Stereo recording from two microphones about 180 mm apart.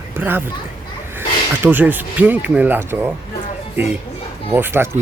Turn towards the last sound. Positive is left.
turn(degrees=-10)  # may be behind; listen again after turning